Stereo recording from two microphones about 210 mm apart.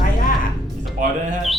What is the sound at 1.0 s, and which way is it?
Speech, 40° right (ahead or behind).